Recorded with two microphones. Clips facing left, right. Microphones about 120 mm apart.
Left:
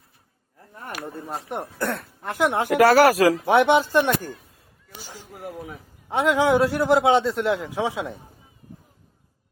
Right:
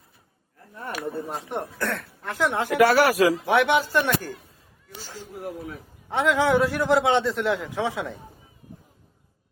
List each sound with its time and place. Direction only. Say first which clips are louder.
1.8 s a man's voice: left 2 dB; 20° left (ahead or behind)
2.6 s speech: left 3 dB; 40° left (ahead or behind)
3.4 s speech: left 3 dB; 25° left (ahead or behind)
4.9 s a sound: right 1 dB; 15° left (ahead or behind)
5.6 s a man's voice: right 1 dB; 15° left (ahead or behind)